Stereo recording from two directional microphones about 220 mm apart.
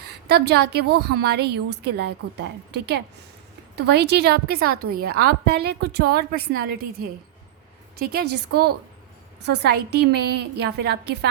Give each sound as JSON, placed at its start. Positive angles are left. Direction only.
{"t": 0.1, "sound": "a woman's voice", "side_deg": -50}